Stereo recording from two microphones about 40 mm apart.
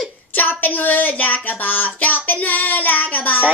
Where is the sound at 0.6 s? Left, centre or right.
Left.